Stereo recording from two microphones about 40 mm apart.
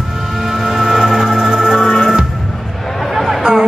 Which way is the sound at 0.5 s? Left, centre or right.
Centre.